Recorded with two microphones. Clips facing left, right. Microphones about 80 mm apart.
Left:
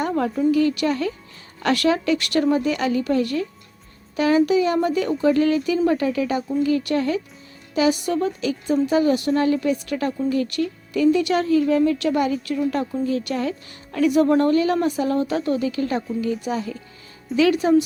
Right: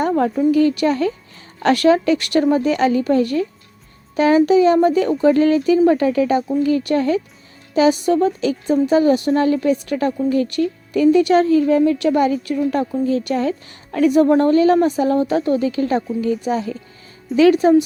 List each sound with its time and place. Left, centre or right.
0.5 s a woman's voice: right
13.3 s a woman's voice: right
14.1 s a woman's voice: right